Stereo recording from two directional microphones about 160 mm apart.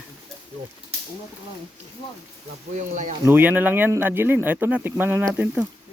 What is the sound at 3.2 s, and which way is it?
A man's voice, 10° right (ahead or behind).